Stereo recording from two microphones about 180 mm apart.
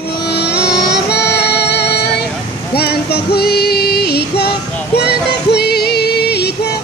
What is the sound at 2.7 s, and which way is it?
Music, 65° left (ahead or behind).